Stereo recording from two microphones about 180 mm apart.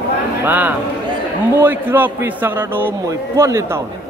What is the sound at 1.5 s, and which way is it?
A man's voice, 10° right (ahead or behind).